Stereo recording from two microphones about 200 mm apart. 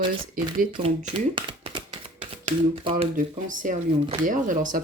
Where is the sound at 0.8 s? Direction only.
30° right (ahead or behind).